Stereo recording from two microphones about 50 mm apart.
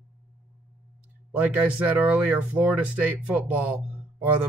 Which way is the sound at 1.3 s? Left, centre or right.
Right.